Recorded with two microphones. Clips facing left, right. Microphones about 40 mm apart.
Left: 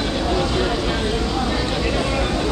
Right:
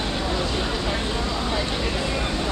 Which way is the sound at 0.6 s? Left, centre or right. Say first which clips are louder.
Left 5 dB; left.